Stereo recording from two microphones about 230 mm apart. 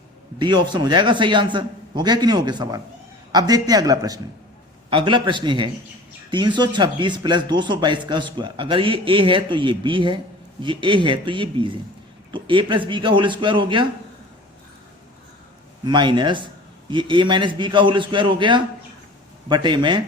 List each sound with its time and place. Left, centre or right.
0.3 s speech: centre
15.8 s speech: centre